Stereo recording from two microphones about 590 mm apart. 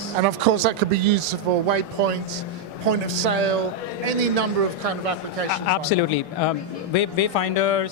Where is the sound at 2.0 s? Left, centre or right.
Right.